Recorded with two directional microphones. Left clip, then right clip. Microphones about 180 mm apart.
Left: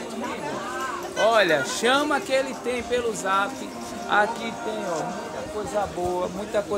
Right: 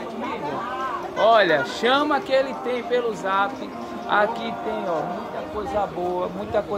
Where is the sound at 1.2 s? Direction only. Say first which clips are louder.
Right 3 dB; 15° left (ahead or behind).